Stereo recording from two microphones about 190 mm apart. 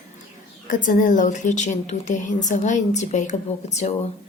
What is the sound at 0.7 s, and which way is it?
A woman's voice, 45° left (ahead or behind).